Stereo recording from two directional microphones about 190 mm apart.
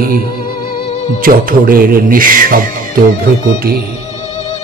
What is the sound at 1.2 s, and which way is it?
Music, 45° right (ahead or behind).